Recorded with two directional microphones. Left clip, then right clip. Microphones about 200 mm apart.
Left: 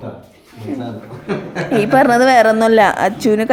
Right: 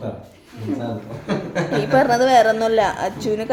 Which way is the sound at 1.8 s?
30° left (ahead or behind).